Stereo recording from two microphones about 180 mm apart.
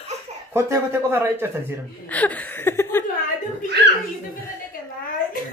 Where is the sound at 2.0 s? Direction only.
10° left (ahead or behind).